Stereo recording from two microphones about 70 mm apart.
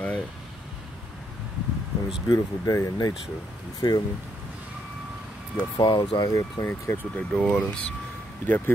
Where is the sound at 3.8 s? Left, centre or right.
Left.